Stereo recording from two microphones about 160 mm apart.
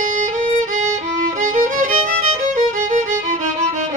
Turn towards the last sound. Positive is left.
turn(degrees=-50)  # may be behind; listen again after turning